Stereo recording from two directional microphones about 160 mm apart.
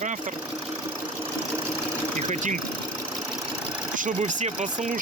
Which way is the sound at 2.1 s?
50° right (ahead or behind).